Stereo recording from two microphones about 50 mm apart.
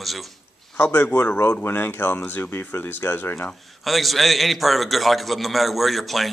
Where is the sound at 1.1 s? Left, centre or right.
Left.